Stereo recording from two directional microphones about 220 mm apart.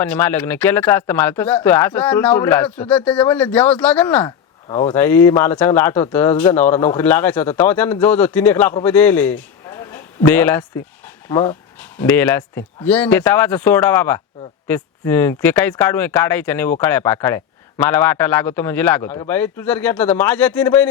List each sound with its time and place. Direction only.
0.0 s speech: 10° left (ahead or behind)
4.7 s speech: 20° left (ahead or behind)
4.9 s speech: 10° left (ahead or behind)